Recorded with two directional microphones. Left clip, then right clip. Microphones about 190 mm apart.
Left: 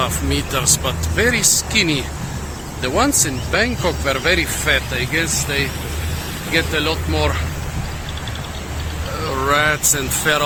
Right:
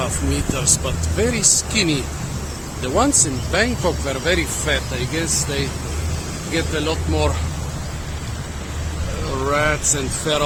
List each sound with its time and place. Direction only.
0.5 s speech: centre (ahead or behind); by 7.3 s 15° right (ahead or behind)
9.5 s speech: 5° left (ahead or behind)